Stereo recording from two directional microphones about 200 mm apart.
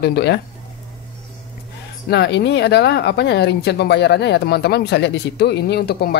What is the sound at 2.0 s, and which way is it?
Speech, 60° left (ahead or behind).